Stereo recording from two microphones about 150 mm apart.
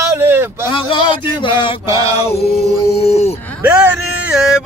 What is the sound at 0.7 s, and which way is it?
Male singing, 35° left (ahead or behind).